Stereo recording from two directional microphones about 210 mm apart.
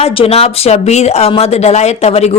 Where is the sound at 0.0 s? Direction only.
25° left (ahead or behind).